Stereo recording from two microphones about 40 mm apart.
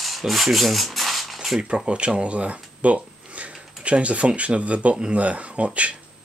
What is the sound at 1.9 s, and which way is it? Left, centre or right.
Speech, right.